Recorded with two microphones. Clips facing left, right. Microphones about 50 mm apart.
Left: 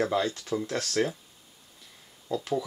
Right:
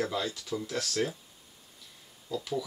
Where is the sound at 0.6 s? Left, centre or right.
Left.